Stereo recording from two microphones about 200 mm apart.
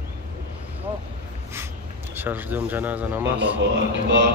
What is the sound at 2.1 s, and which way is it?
Speech, 10° right (ahead or behind).